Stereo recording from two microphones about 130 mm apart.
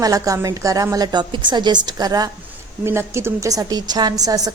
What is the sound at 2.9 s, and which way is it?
A woman's voice, 20° right (ahead or behind).